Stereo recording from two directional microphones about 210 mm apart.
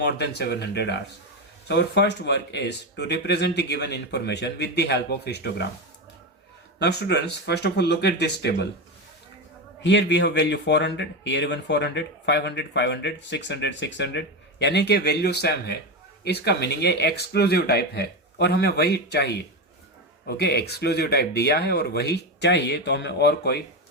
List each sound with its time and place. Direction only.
0.0 s speech: 50° left (ahead or behind)
6.7 s speech: 55° left (ahead or behind)
9.8 s speech: 55° left (ahead or behind)